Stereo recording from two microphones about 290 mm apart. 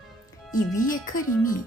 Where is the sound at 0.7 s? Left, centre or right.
Left.